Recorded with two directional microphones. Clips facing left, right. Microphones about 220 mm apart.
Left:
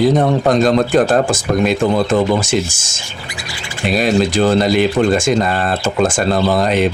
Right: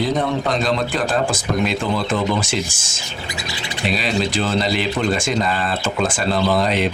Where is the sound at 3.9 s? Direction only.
45° left (ahead or behind).